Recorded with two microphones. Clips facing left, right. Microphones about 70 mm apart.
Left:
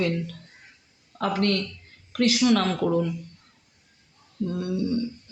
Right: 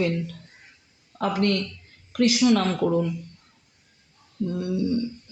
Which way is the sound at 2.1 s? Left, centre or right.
Left.